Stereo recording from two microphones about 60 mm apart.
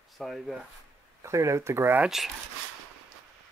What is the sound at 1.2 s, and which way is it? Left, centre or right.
Speech, right.